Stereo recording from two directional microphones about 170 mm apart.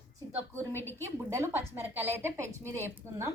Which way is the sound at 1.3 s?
15° right (ahead or behind).